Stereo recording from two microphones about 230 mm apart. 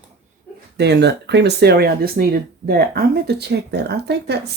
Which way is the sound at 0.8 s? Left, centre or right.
Right.